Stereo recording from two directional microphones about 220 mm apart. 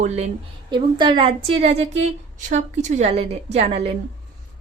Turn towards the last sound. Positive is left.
turn(degrees=-30)  # may be behind; listen again after turning